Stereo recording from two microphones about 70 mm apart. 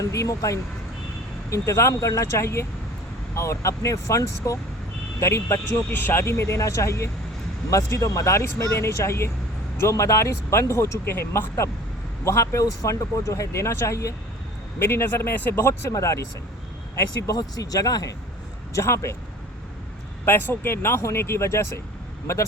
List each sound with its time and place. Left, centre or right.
0.0 s speech: left
5.9 s speech: left
14.8 s speech: left
15.9 s speech: left
17.3 s speech: left
18.7 s speech: left
20.2 s speech: left